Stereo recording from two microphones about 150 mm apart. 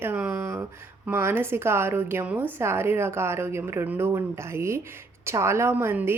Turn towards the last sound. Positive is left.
turn(degrees=-15)  # may be behind; listen again after turning